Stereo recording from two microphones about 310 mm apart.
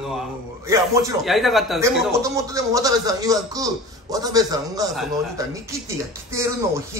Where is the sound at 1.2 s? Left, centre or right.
Centre.